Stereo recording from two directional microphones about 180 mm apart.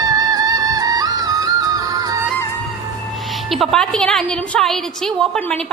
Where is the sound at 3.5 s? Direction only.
Centre (ahead or behind).